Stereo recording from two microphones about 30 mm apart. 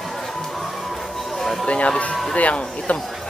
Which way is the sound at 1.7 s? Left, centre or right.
Left.